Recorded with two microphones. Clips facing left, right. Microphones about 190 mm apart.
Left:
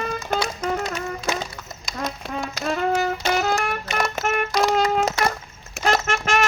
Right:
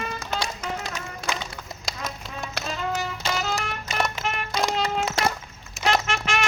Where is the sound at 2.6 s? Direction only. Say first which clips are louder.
Left 8 dB; 60° left (ahead or behind).